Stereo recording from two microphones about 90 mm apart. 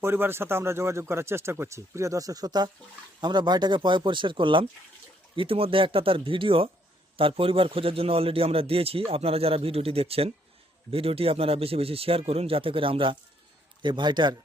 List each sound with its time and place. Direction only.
0.0 s speech: 25° right (ahead or behind); by 4.6 s 65° right (ahead or behind)
5.4 s a man's voice: 90° right
13.8 s speech: 60° right (ahead or behind)